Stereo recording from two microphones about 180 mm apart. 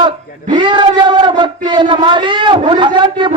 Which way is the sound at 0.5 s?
25° right (ahead or behind).